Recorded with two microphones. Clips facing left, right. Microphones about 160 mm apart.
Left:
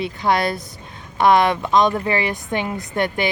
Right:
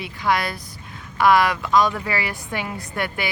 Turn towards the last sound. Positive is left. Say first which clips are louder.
# left 6 dB
turn(degrees=25)  # may be behind; listen again after turning